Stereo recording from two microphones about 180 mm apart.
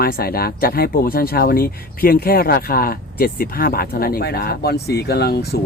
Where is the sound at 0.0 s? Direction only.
55° left (ahead or behind).